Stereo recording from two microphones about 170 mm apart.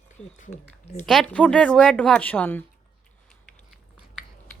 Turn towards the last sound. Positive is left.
turn(degrees=0)  # may be behind; listen again after turning